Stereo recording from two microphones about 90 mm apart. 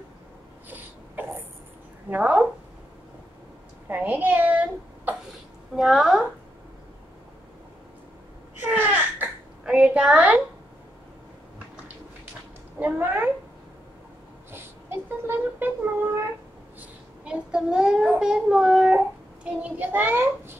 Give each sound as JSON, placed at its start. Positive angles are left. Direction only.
{"t": 0.7, "sound": "a sound", "side_deg": -20}
{"t": 2.0, "sound": "a child's voice", "side_deg": -20}
{"t": 3.9, "sound": "a child's voice", "side_deg": -20}
{"t": 5.8, "sound": "speech", "side_deg": -5}
{"t": 8.6, "sound": "a sound", "side_deg": -20}
{"t": 9.7, "sound": "a child's voice", "side_deg": -10}
{"t": 12.7, "sound": "speech", "side_deg": -20}
{"t": 15.2, "sound": "speech", "side_deg": -25}
{"t": 17.2, "sound": "a child's voice", "side_deg": -10}